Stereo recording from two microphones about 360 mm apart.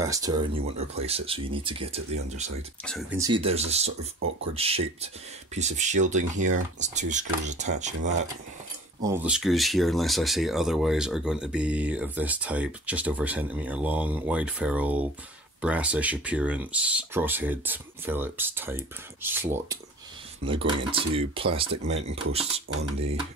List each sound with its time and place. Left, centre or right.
0.0 s speech: centre
2.8 s speech: centre
3.2 s speech: centre
9.0 s speech: centre